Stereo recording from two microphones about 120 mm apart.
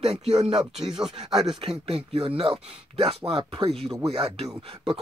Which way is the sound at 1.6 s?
55° right (ahead or behind).